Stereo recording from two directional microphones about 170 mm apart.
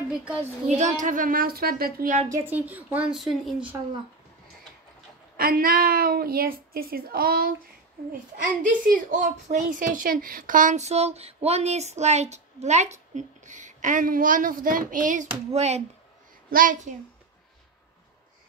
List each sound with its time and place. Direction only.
0.7 s a woman's voice: 45° right (ahead or behind); by 2.1 s 60° right (ahead or behind)
2.2 s a woman's voice: 15° right (ahead or behind)
5.4 s a woman's voice: 60° right (ahead or behind)
8.6 s speech: 50° right (ahead or behind)
16.4 s speech: 55° right (ahead or behind)